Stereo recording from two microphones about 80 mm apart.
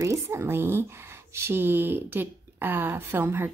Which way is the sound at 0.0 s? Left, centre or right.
Right.